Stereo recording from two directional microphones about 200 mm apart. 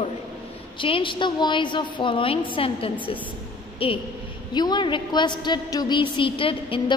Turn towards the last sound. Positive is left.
turn(degrees=25)  # may be behind; listen again after turning